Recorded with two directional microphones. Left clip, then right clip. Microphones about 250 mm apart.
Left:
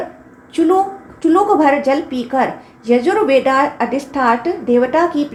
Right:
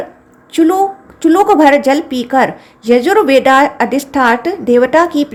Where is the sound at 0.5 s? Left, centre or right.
Right.